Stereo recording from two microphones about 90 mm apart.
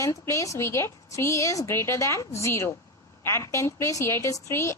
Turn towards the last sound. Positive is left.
turn(degrees=35)  # may be behind; listen again after turning